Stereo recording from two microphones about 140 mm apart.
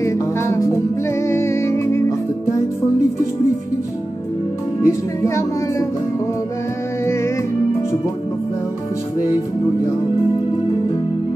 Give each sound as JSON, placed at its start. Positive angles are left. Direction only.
{"t": 0.0, "sound": "music", "side_deg": 20}
{"t": 4.8, "sound": "speech", "side_deg": 20}